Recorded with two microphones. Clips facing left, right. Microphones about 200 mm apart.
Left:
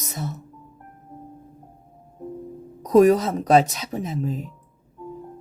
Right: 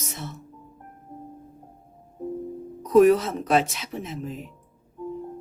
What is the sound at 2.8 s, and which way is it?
Speech, 40° left (ahead or behind).